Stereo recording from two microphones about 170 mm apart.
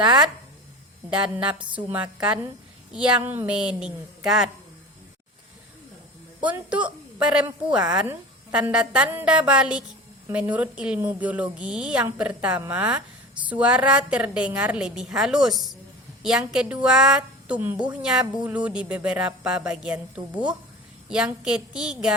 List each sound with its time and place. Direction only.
0.0 s speech: 25° right (ahead or behind)
1.1 s a woman's voice: 5° right (ahead or behind)
6.4 s a woman's voice: 10° right (ahead or behind)